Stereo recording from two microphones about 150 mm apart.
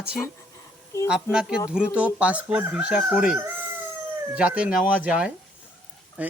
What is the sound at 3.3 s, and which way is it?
Chicken, 15° right (ahead or behind).